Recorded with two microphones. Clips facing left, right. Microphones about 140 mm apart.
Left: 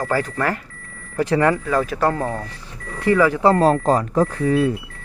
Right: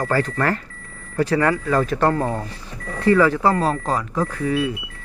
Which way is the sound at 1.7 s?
10° left (ahead or behind).